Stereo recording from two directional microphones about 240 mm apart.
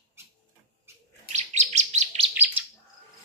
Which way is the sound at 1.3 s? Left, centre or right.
Right.